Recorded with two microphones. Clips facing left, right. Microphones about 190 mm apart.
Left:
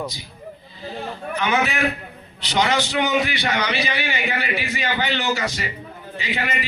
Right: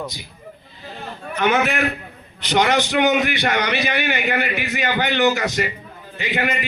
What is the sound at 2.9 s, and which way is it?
A man's voice, 55° right (ahead or behind).